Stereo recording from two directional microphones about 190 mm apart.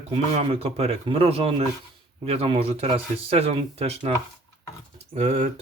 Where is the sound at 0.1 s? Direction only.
30° right (ahead or behind).